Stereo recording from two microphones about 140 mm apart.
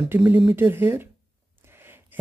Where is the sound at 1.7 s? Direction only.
15° right (ahead or behind).